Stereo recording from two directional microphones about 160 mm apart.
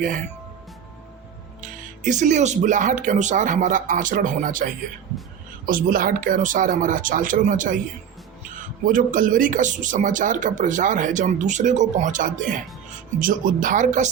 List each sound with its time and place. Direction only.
1.6 s speech: 50° right (ahead or behind)
8.9 s speech: 60° right (ahead or behind)